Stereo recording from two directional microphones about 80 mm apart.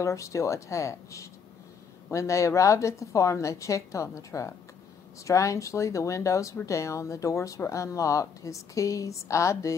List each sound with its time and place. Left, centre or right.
0.0 s a woman's voice: left